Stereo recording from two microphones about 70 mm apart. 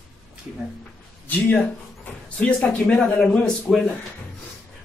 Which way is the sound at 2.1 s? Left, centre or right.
Centre.